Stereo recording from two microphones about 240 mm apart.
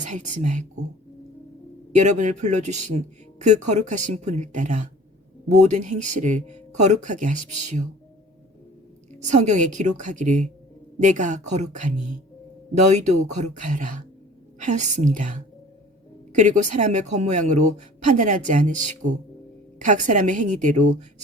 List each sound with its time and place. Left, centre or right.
0.0 s speech: right
1.9 s speech: right
9.2 s speech: right